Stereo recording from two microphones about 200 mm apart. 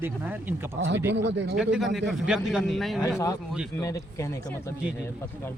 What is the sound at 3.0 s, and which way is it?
Speech, 15° left (ahead or behind).